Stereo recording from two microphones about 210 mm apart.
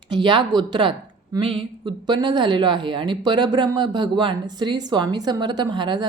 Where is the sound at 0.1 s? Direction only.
20° right (ahead or behind).